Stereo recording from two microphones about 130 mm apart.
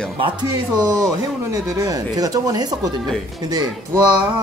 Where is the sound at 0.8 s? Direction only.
25° right (ahead or behind).